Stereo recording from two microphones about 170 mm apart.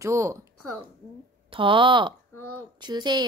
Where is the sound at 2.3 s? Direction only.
15° left (ahead or behind).